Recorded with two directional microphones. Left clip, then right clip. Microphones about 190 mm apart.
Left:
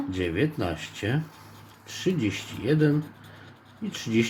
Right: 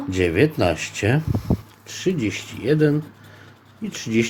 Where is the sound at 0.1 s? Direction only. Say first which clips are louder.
Right 10 dB; 30° right (ahead or behind).